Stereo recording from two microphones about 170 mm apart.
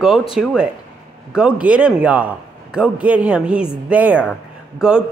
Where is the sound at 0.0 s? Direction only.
Centre (ahead or behind).